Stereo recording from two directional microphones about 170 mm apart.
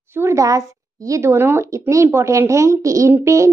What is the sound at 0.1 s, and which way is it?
Speech, 15° right (ahead or behind).